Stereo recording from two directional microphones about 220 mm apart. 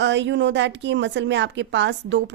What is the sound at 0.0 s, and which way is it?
A woman's voice, 55° right (ahead or behind).